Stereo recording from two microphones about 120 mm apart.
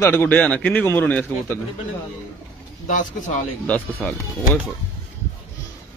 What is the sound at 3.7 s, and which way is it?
Speech, 15° left (ahead or behind).